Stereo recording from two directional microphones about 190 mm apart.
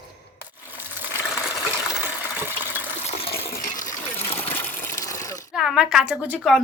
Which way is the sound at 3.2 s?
50° left (ahead or behind).